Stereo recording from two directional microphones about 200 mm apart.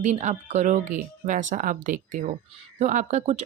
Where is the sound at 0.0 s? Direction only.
35° right (ahead or behind).